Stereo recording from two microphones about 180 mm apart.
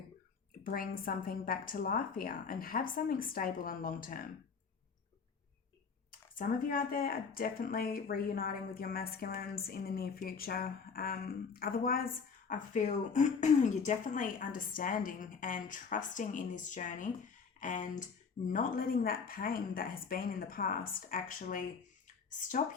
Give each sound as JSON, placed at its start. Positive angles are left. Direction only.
{"t": 0.6, "sound": "speech", "side_deg": 55}
{"t": 6.1, "sound": "speech", "side_deg": 50}